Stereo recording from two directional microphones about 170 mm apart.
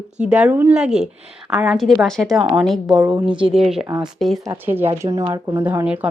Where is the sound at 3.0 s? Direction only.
20° right (ahead or behind).